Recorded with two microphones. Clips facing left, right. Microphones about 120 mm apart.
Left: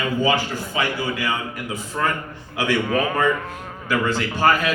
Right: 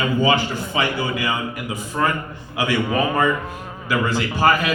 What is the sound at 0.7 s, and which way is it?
A man's voice, 15° right (ahead or behind).